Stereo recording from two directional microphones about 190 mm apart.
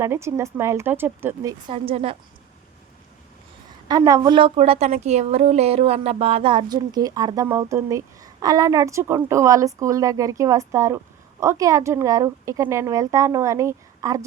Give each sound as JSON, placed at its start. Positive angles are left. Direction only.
{"t": 0.0, "sound": "a woman's voice", "side_deg": -15}
{"t": 3.8, "sound": "a woman's voice", "side_deg": -20}